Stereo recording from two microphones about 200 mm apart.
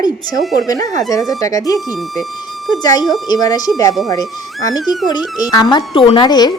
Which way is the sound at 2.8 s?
20° left (ahead or behind).